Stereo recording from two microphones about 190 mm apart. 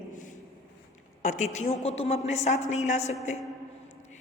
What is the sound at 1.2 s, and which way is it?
A woman's voice, 40° left (ahead or behind).